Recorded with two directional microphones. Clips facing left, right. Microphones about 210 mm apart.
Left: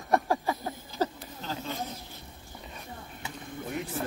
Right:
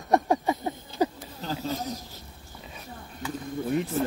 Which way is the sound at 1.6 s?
40° right (ahead or behind).